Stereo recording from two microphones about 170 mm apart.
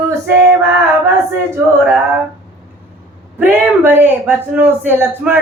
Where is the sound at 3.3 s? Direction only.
10° right (ahead or behind).